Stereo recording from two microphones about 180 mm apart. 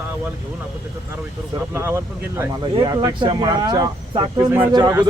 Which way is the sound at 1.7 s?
15° right (ahead or behind).